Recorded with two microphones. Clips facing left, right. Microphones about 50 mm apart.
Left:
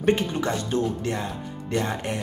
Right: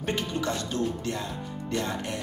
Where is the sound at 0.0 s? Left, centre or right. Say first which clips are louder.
Left 6 dB; left.